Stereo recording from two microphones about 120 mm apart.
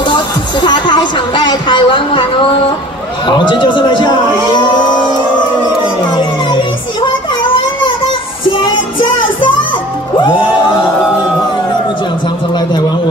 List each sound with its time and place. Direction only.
0.0 s music: 40° left (ahead or behind)
3.3 s a man's voice: 40° left (ahead or behind)
6.0 s a sound: 40° left (ahead or behind)
8.5 s music: 45° left (ahead or behind)